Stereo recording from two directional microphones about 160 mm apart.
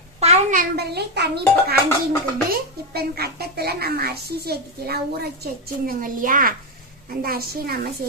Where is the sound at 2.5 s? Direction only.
75° right (ahead or behind).